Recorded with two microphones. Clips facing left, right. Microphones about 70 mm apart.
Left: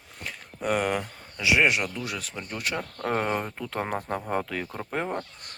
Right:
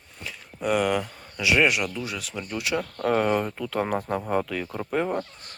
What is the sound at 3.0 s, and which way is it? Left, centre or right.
Speech, left.